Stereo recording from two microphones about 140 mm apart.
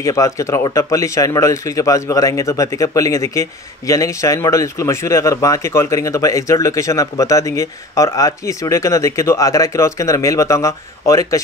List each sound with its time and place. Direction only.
0.0 s speech: 20° left (ahead or behind)